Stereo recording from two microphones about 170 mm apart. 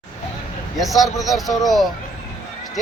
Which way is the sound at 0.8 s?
Centre (ahead or behind).